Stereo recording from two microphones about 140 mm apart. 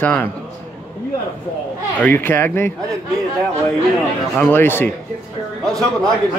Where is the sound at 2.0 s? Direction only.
15° left (ahead or behind).